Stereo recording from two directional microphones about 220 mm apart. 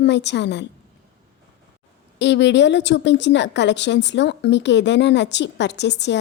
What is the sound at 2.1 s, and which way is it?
A woman's voice, 50° left (ahead or behind).